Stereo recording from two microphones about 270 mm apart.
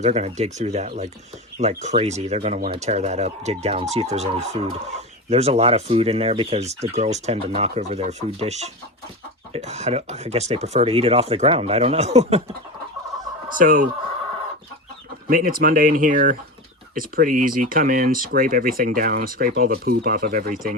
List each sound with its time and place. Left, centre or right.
0.0 s speech: right
13.6 s speech: right
15.3 s speech: right